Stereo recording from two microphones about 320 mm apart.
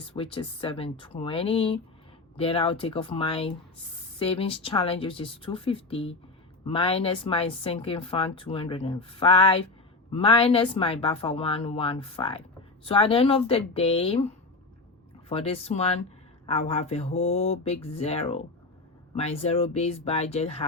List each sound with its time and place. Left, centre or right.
0.0 s speech: centre